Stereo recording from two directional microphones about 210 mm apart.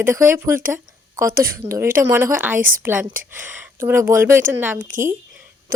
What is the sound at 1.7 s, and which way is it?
Speech, 10° right (ahead or behind).